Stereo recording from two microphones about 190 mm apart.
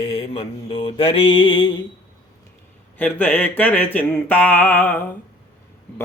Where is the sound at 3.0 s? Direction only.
10° left (ahead or behind).